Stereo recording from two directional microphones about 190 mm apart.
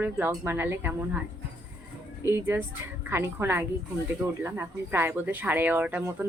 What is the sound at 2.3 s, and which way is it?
Speech, 10° right (ahead or behind).